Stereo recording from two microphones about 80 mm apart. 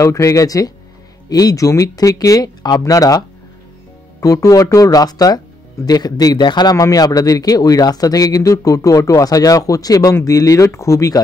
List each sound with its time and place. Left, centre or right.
0.0 s a man's voice: left